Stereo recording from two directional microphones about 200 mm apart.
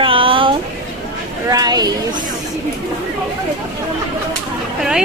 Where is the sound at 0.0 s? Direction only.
25° right (ahead or behind).